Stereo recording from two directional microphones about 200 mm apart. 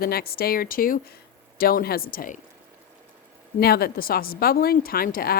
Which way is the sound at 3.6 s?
50° left (ahead or behind).